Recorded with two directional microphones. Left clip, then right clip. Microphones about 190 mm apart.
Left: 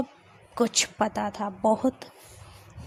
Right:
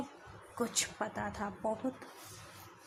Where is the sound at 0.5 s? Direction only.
30° left (ahead or behind).